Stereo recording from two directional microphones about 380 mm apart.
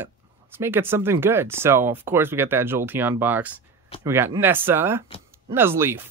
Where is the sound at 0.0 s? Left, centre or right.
Centre.